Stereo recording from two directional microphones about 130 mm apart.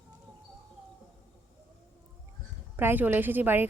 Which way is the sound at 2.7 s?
15° right (ahead or behind).